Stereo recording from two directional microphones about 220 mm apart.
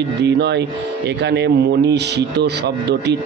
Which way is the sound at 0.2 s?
50° right (ahead or behind).